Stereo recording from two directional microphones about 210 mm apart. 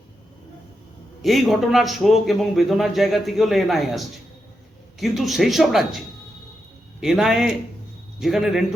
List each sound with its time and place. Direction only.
1.2 s a man's voice: centre (ahead or behind)
7.0 s a man's voice: centre (ahead or behind)